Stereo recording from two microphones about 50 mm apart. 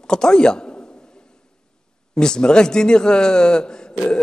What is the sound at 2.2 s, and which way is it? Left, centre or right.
A man's voice, centre.